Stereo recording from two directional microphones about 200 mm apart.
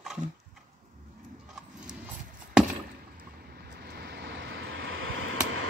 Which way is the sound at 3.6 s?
55° right (ahead or behind).